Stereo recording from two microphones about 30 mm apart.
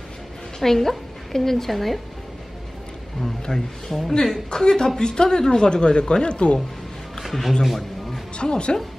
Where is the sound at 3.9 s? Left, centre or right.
Centre.